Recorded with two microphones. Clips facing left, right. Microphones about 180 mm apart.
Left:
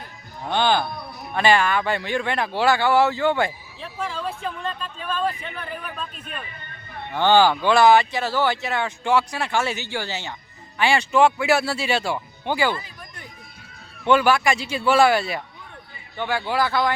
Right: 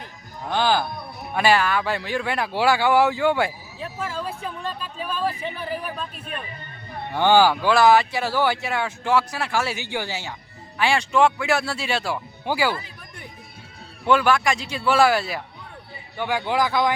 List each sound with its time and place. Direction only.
0.4 s speech: centre (ahead or behind)
10.8 s speech: centre (ahead or behind)
14.1 s speech: centre (ahead or behind)
16.1 s speech: 15° right (ahead or behind)